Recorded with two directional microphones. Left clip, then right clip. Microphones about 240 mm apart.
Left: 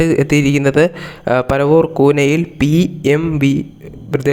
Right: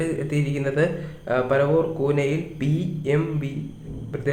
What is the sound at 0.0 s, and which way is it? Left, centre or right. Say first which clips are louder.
Speech: left 13 dB; left.